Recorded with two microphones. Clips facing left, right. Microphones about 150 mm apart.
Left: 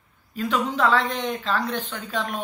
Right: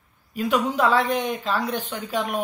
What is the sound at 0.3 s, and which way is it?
Speech, 10° right (ahead or behind).